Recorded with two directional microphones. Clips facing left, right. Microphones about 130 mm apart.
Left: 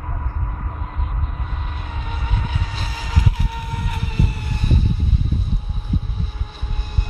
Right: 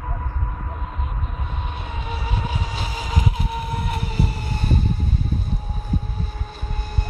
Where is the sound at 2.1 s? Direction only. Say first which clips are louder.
Right 2 dB; 10° right (ahead or behind); by 4.7 s 35° right (ahead or behind).